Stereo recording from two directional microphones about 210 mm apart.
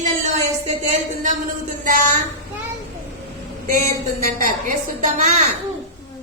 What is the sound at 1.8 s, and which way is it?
Speech, 40° right (ahead or behind).